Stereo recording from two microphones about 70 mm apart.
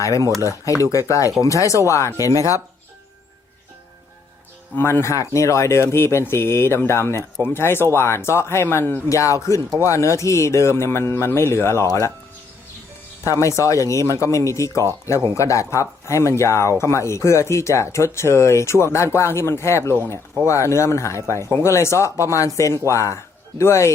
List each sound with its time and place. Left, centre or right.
0.2 s speech: right
0.4 s speech: left
4.7 s speech: left
9.0 s speech: left
13.2 s speech: left